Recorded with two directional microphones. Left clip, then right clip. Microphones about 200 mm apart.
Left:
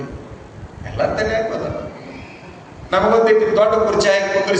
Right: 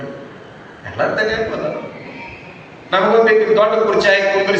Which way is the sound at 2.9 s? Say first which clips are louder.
Right 1 dB; 20° left (ahead or behind).